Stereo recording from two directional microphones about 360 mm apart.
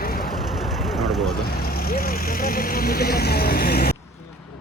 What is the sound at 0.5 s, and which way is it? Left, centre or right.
Vehicle, centre.